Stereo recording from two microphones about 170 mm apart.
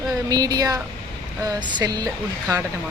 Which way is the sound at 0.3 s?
20° right (ahead or behind).